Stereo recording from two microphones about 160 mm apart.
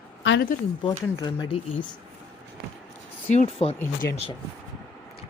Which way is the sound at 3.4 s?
35° left (ahead or behind).